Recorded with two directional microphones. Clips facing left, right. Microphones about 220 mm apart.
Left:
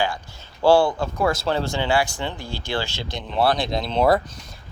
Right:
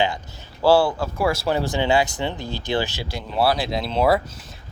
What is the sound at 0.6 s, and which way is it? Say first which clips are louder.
Speech: even; 5° right (ahead or behind).